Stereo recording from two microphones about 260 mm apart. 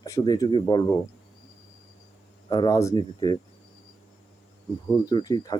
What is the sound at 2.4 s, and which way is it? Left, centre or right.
Speech, centre.